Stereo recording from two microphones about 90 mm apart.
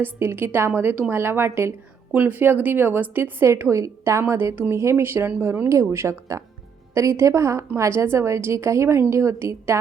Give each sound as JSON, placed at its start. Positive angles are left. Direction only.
{"t": 0.0, "sound": "speech", "side_deg": -25}
{"t": 3.4, "sound": "a woman's voice", "side_deg": -30}